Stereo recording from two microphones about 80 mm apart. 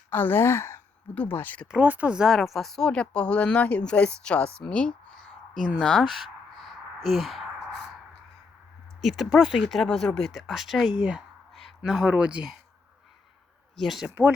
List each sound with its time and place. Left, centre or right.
0.1 s speech: left
1.0 s speech: centre
1.8 s speech: centre
5.8 s a sound: centre
9.0 s speech: centre
10.9 s speech: centre
13.7 s speech: centre